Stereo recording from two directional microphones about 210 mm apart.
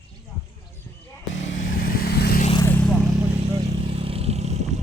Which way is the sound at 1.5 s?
40° left (ahead or behind).